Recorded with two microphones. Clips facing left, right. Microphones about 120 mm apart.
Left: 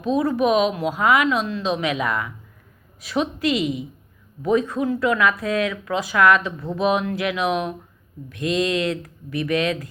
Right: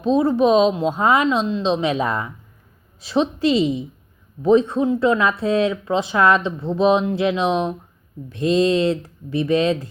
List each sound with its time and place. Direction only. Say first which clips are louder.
0.0 s speech: right 4 dB; 30° right (ahead or behind)